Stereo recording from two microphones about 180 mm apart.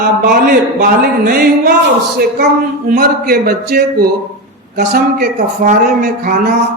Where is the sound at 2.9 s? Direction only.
55° right (ahead or behind).